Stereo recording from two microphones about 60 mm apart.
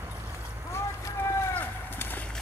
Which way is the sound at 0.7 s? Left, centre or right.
Left.